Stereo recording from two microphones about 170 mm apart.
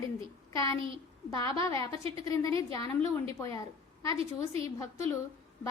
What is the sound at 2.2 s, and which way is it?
A woman's voice, 20° left (ahead or behind).